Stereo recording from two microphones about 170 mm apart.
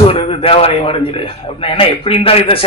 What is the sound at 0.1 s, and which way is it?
A man's voice, 35° left (ahead or behind).